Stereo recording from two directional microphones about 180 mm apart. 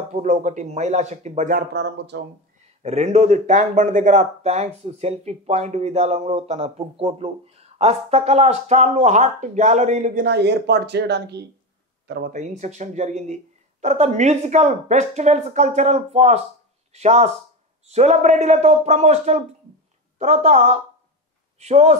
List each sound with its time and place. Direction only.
0.1 s speech: 40° right (ahead or behind)
1.6 s speech: 70° right (ahead or behind)
2.8 s speech: 35° right (ahead or behind)
10.2 s speech: 70° right (ahead or behind)
12.1 s speech: 50° right (ahead or behind)